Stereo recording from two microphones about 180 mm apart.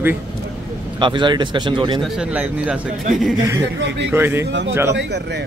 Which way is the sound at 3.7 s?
90° right.